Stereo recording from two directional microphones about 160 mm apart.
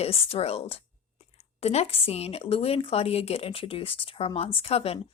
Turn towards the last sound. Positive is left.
turn(degrees=40)  # may be behind; listen again after turning